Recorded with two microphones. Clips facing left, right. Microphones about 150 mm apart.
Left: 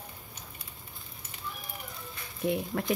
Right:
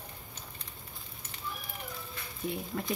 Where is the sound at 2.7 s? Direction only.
70° left (ahead or behind).